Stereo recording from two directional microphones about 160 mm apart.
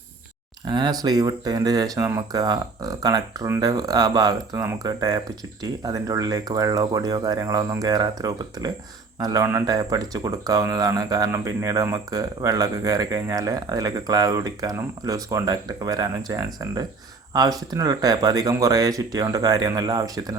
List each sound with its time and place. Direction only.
0.7 s speech: 25° right (ahead or behind)